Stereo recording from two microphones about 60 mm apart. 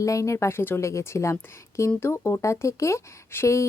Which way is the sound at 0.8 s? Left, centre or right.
Left.